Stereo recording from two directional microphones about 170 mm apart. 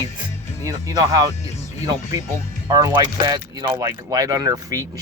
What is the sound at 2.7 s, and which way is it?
Speech, 20° right (ahead or behind).